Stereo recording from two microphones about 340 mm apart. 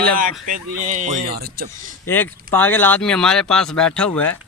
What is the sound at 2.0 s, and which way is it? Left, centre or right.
Speech, centre.